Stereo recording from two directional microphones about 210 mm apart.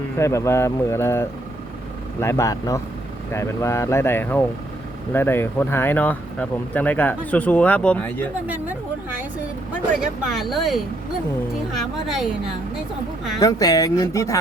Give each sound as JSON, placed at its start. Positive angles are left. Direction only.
{"t": 0.2, "sound": "speech", "side_deg": 15}
{"t": 8.4, "sound": "a sound", "side_deg": -10}
{"t": 10.0, "sound": "speech", "side_deg": 0}
{"t": 12.0, "sound": "speech", "side_deg": 0}
{"t": 13.4, "sound": "speech", "side_deg": 15}